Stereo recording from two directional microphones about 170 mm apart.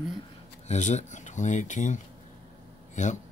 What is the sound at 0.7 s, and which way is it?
Speech, 45° left (ahead or behind).